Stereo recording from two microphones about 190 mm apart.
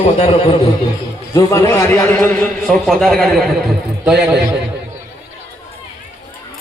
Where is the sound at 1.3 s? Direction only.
15° left (ahead or behind); by 4.4 s 5° right (ahead or behind).